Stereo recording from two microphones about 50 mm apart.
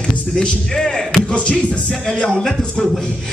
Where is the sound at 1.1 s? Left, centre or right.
Left.